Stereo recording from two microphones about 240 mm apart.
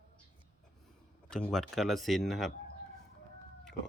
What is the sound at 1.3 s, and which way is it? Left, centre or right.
A man's voice, centre.